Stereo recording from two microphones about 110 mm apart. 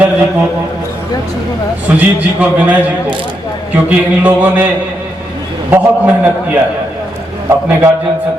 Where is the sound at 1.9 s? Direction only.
10° right (ahead or behind).